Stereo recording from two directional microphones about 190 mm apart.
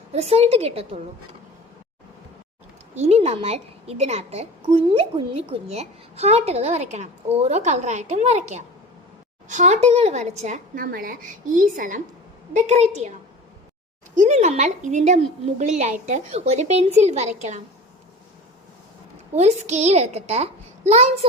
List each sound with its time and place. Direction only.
0.1 s a woman's voice: 35° right (ahead or behind)
2.9 s a woman's voice: 35° right (ahead or behind)
14.2 s a woman's voice: 40° right (ahead or behind)
19.3 s a woman's voice: 35° right (ahead or behind)